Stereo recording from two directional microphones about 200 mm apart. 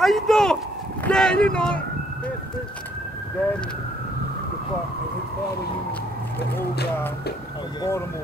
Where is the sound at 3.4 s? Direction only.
5° left (ahead or behind).